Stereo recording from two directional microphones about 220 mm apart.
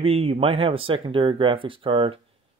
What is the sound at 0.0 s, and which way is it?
Speech, 25° right (ahead or behind).